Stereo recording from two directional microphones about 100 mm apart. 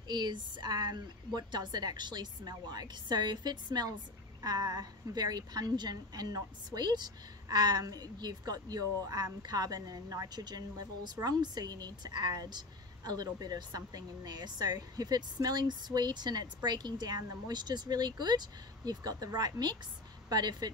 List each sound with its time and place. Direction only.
0.1 s a woman's voice: 45° right (ahead or behind)